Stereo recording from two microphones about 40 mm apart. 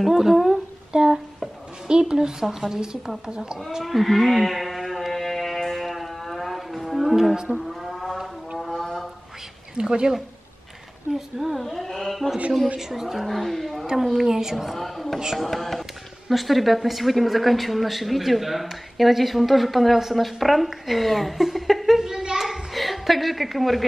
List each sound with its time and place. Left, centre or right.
0.0 s a woman's voice: centre
3.8 s a sound: centre
9.8 s a woman's voice: right
11.1 s a woman's voice: centre
11.6 s speech: centre
12.7 s a woman's voice: centre
14.8 s speech: centre
22.4 s a sound: centre